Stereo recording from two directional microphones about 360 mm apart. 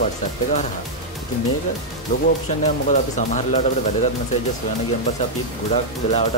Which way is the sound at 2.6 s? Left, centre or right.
Centre.